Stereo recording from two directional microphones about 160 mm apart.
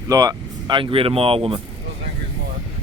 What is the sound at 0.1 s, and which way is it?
A man's voice, 25° right (ahead or behind).